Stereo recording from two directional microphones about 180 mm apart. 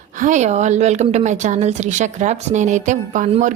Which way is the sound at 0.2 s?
45° right (ahead or behind).